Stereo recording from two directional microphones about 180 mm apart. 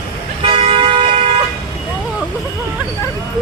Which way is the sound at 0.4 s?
30° right (ahead or behind).